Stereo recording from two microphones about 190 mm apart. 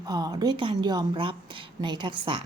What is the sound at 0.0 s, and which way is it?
A woman's voice, 20° right (ahead or behind).